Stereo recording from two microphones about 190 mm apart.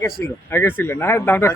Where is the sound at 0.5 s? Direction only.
10° left (ahead or behind).